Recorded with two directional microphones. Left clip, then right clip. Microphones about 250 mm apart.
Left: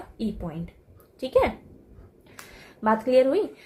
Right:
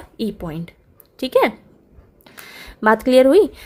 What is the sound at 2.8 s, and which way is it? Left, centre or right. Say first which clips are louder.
Speech: right 7 dB; right.